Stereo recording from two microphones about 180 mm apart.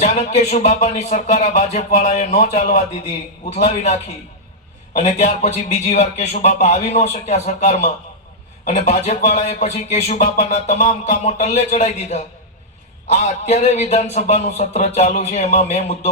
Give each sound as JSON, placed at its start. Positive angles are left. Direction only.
{"t": 0.0, "sound": "speech", "side_deg": 40}